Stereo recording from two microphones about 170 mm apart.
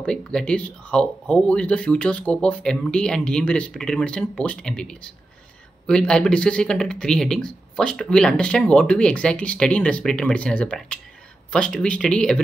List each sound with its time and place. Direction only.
0.0 s speech: 5° left (ahead or behind)